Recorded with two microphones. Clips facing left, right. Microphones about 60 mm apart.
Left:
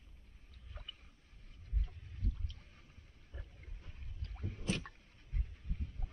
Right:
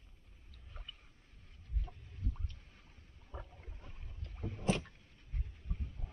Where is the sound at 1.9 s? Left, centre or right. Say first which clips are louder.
Right 6 dB; centre.